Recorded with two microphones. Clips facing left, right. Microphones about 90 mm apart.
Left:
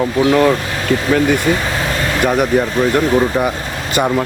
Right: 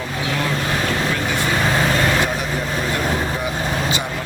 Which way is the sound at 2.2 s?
55° left (ahead or behind).